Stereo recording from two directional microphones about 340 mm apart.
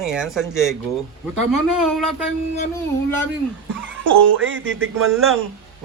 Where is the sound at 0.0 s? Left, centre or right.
Centre.